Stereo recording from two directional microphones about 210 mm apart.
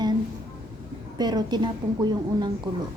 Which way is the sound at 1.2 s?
20° right (ahead or behind).